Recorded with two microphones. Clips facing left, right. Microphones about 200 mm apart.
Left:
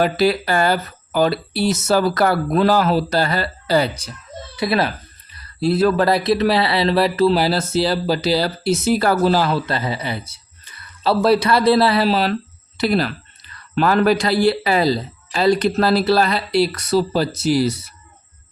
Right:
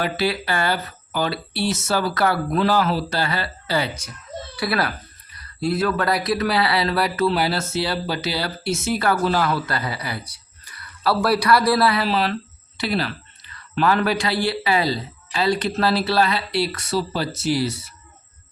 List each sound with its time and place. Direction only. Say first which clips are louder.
0.0 s speech: left 6 dB; 45° left (ahead or behind)
4.5 s speech: left 4 dB; 20° left (ahead or behind)
5.5 s speech: left 5 dB; 30° left (ahead or behind)